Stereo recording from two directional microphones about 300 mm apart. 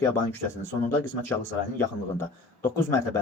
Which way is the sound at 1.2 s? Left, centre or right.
Centre.